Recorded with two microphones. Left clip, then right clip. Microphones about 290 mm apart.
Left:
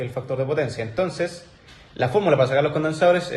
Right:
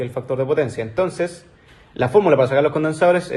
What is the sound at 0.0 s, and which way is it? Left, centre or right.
Speech, right.